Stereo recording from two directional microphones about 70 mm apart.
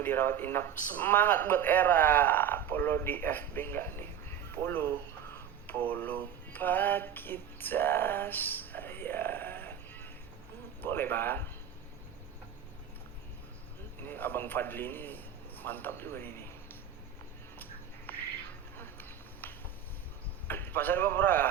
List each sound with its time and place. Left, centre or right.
0.0 s speech: left
14.1 s a man's voice: left
18.1 s bird: left
20.5 s a man's voice: left